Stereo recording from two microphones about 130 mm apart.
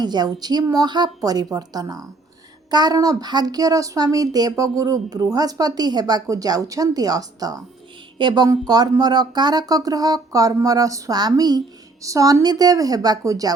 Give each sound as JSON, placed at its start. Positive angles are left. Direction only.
{"t": 0.0, "sound": "speech", "side_deg": -35}